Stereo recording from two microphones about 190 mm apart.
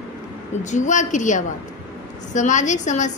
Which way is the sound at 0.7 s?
40° left (ahead or behind).